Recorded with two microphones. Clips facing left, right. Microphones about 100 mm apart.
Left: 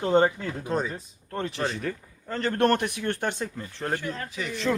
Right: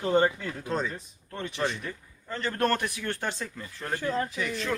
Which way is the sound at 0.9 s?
35° left (ahead or behind).